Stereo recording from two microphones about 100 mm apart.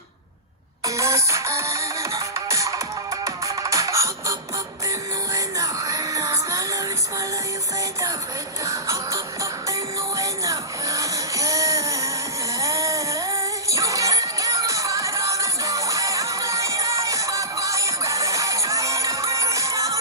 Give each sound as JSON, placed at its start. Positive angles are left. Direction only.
{"t": 0.9, "sound": "music", "side_deg": -30}
{"t": 8.6, "sound": "music", "side_deg": -30}